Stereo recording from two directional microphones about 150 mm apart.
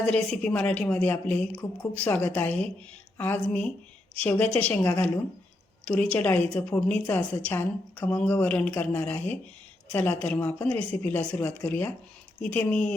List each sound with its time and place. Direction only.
0.0 s a woman's voice: 5° left (ahead or behind)